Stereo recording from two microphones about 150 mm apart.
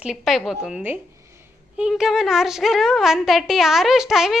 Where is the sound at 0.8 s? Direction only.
15° right (ahead or behind).